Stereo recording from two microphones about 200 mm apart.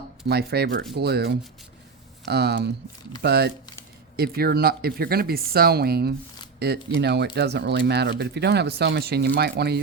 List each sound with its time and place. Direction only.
0.3 s speech: 55° right (ahead or behind)